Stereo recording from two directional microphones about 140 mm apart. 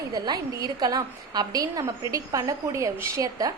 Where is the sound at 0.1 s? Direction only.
25° right (ahead or behind).